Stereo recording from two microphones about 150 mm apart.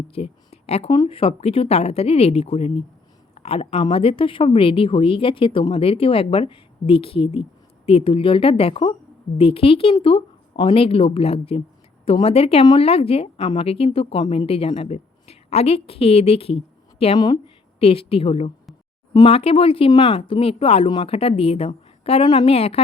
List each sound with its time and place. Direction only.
0.1 s a sound: 40° left (ahead or behind)
0.9 s a woman's voice: 35° left (ahead or behind)
17.2 s speech: 25° left (ahead or behind)
17.7 s a woman's voice: 40° left (ahead or behind)